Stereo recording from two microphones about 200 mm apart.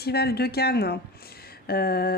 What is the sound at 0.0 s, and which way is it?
Speech, 50° left (ahead or behind).